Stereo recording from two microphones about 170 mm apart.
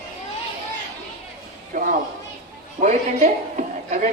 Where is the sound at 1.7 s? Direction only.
55° right (ahead or behind).